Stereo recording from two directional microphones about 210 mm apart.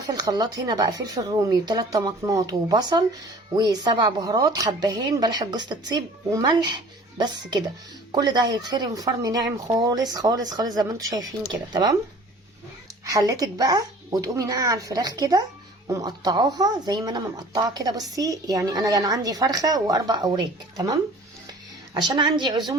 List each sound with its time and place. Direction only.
0.1 s a woman's voice: 20° right (ahead or behind)
13.1 s speech: 15° right (ahead or behind)
22.0 s a woman's voice: 20° right (ahead or behind)